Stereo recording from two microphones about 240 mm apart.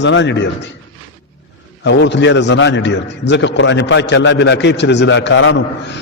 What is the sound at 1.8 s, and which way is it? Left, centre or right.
A man's voice, left.